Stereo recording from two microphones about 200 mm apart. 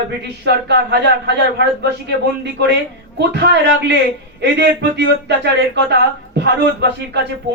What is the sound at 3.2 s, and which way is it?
Speech, 60° right (ahead or behind).